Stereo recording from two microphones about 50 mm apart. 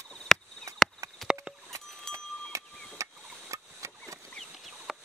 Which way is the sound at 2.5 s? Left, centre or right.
Right.